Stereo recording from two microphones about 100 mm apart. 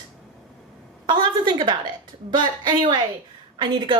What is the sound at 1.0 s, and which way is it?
A woman's voice, 50° right (ahead or behind).